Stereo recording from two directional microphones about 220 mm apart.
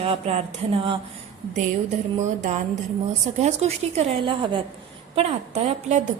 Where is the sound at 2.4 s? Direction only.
35° right (ahead or behind).